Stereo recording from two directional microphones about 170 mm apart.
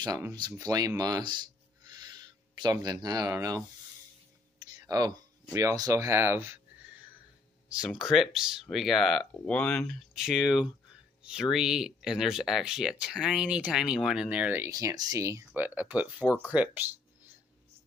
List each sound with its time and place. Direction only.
0.0 s speech: 20° right (ahead or behind)
4.7 s speech: 20° right (ahead or behind)
8.1 s speech: 5° right (ahead or behind)
10.1 s speech: 5° right (ahead or behind)